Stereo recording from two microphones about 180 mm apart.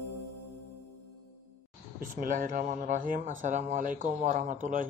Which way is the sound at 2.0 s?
45° right (ahead or behind).